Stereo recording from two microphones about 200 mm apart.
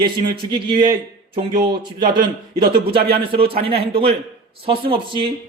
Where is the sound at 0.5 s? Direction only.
25° right (ahead or behind).